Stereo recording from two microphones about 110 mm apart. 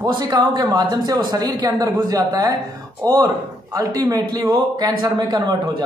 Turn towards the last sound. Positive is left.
turn(degrees=-40)  # may be behind; listen again after turning